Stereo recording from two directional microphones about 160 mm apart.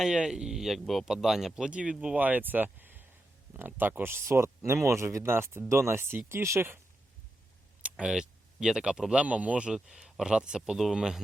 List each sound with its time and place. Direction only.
0.0 s speech: 5° right (ahead or behind)
7.8 s speech: 10° right (ahead or behind)